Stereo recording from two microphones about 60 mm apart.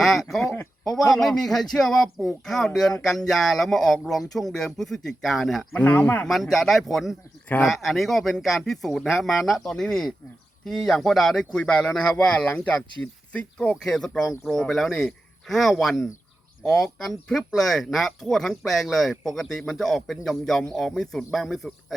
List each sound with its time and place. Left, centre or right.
0.0 s a sound: centre
0.4 s speech: left
0.9 s speech: centre
5.7 s speech: left
6.2 s speech: centre
13.8 s speech: centre